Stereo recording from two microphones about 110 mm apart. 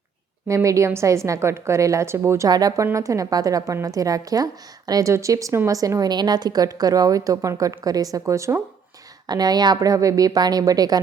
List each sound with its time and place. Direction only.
0.4 s a woman's voice: 30° right (ahead or behind)
9.2 s a woman's voice: 40° right (ahead or behind)